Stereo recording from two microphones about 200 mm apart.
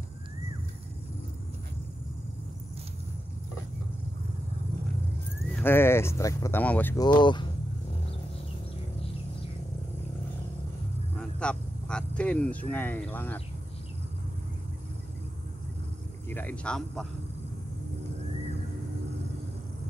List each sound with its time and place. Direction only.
5.6 s speech: 10° left (ahead or behind)
7.1 s speech: 20° left (ahead or behind)
11.1 s speech: 5° left (ahead or behind)
16.3 s speech: 10° left (ahead or behind)